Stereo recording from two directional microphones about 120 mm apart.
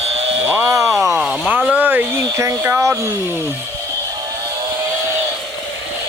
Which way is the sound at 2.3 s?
25° right (ahead or behind).